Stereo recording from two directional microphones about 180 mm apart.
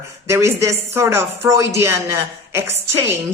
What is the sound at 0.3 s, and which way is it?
A woman's voice, 15° right (ahead or behind).